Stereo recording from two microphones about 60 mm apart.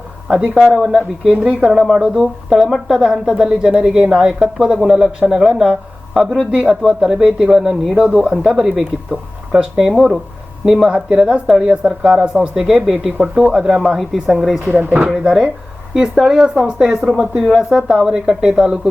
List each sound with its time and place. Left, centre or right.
0.3 s a woman's voice: centre
1.3 s a woman's voice: centre
1.7 s a woman's voice: centre
6.6 s a woman's voice: centre
8.1 s a woman's voice: centre
10.8 s a woman's voice: centre
14.8 s speech: right
15.2 s a woman's voice: centre